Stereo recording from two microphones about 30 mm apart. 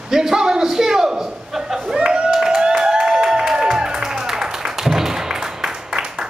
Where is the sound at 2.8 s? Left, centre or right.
Centre.